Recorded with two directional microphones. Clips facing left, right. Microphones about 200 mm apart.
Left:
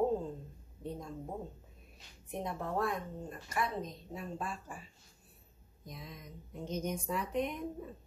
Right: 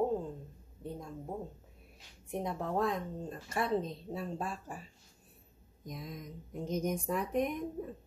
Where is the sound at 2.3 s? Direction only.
15° right (ahead or behind); by 4.8 s 40° right (ahead or behind).